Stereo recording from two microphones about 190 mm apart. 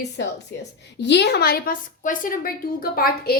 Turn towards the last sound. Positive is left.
turn(degrees=50)  # may be behind; listen again after turning